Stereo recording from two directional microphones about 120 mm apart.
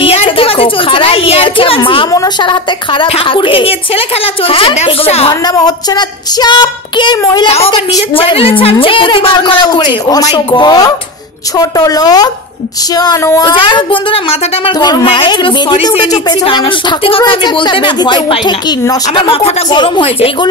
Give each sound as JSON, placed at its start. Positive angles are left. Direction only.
{"t": 0.0, "sound": "a woman's voice", "side_deg": 50}
{"t": 5.5, "sound": "female singing", "side_deg": 35}
{"t": 7.4, "sound": "a woman's voice", "side_deg": 60}
{"t": 7.7, "sound": "a woman's voice", "side_deg": 45}
{"t": 10.3, "sound": "female singing", "side_deg": 40}
{"t": 16.4, "sound": "a woman's voice", "side_deg": 50}